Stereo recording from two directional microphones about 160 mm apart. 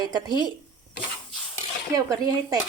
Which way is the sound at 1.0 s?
30° left (ahead or behind).